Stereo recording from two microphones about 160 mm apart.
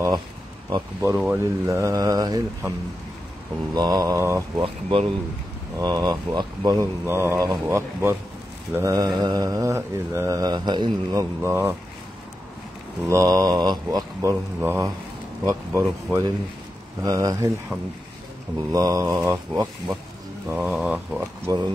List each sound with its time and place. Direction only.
0.7 s mantra: 25° right (ahead or behind)
1.1 s a sound: 5° right (ahead or behind)
1.4 s mantra: 20° right (ahead or behind)
3.7 s mantra: 25° right (ahead or behind)
4.6 s speech: 35° right (ahead or behind)
5.8 s mantra: 25° right (ahead or behind)
13.1 s mantra: 20° right (ahead or behind)
15.4 s speech: 15° right (ahead or behind)
17.0 s mantra: 20° right (ahead or behind)
20.5 s a sound: 5° right (ahead or behind)
21.5 s mantra: 25° right (ahead or behind)